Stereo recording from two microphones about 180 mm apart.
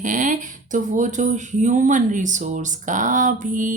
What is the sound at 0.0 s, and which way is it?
Speech, 45° right (ahead or behind).